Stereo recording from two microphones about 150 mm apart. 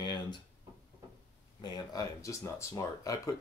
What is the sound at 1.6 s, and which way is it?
Speech, 25° left (ahead or behind).